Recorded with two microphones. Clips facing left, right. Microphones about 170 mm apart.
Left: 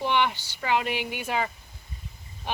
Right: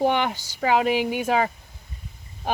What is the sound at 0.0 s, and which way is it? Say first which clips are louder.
Speech: right 3 dB; 45° right (ahead or behind).